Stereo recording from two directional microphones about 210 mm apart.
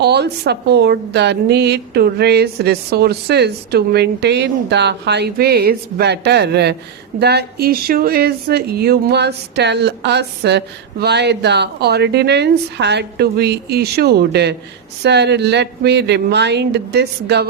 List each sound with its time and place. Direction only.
0.0 s a woman's voice: 50° right (ahead or behind)